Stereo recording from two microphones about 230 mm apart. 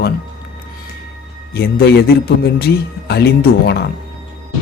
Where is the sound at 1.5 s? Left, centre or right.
Left.